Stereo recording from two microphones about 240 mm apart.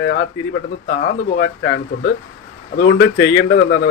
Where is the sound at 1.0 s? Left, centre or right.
Left.